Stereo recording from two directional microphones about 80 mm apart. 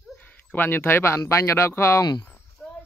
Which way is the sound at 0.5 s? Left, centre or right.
Left.